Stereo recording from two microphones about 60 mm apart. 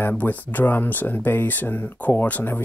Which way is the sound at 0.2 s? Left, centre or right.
Left.